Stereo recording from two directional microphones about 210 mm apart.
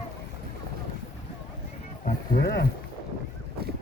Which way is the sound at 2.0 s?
45° left (ahead or behind).